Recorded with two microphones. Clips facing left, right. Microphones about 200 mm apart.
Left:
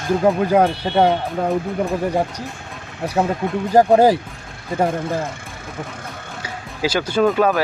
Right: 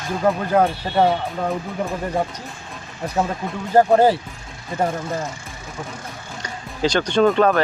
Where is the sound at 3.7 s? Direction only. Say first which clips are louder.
Left 2 dB; 15° left (ahead or behind).